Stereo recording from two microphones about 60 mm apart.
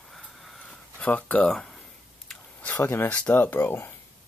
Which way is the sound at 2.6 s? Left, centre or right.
Left.